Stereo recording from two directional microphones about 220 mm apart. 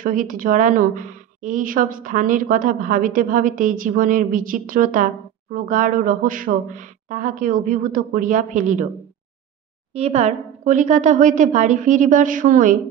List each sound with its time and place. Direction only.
0.0 s a woman's voice: 40° right (ahead or behind)
9.9 s a woman's voice: 30° right (ahead or behind)